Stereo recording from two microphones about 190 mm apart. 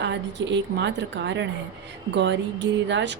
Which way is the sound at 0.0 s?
70° right (ahead or behind).